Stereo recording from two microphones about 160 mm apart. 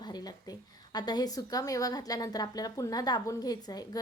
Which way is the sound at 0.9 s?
25° left (ahead or behind).